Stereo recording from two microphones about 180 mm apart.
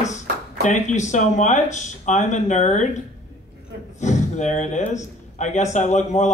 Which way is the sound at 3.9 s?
40° left (ahead or behind).